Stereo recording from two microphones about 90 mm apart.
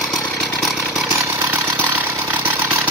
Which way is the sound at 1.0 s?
25° right (ahead or behind).